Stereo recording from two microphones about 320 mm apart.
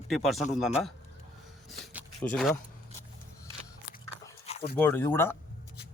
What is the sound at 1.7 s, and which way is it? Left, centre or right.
Speech, centre.